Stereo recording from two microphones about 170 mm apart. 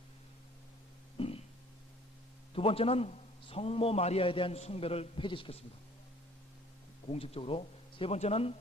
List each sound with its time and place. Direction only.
1.1 s a sound: 35° left (ahead or behind)
2.5 s a man's voice: 35° left (ahead or behind)
7.1 s a man's voice: 35° left (ahead or behind)